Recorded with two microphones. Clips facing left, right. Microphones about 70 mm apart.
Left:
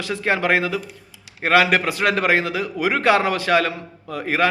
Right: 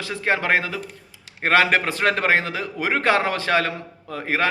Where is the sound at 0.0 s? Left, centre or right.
Right.